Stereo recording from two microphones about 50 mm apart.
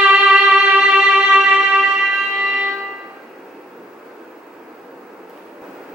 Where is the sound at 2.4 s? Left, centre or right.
Right.